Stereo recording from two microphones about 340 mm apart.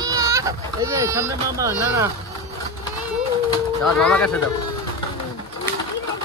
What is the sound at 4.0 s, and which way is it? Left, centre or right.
Speech, centre.